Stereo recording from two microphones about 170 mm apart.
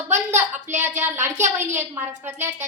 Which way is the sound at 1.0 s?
15° right (ahead or behind).